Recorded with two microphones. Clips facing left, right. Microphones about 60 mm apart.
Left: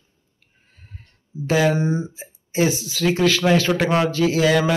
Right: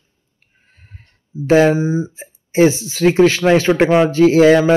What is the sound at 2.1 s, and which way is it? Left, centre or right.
Speech, right.